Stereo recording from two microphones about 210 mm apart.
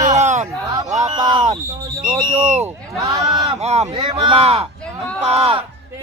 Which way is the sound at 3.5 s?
30° right (ahead or behind).